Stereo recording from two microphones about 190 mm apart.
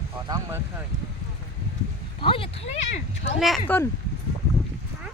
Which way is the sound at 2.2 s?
30° left (ahead or behind).